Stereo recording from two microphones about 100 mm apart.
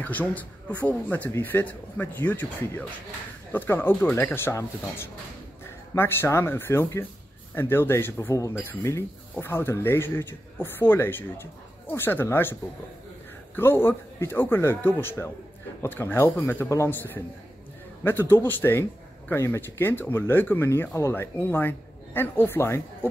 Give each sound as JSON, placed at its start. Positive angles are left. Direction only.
{"t": 0.0, "sound": "a man's voice", "side_deg": 15}
{"t": 13.6, "sound": "a man's voice", "side_deg": 20}